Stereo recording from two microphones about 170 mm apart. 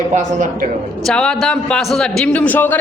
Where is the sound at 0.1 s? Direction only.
45° right (ahead or behind).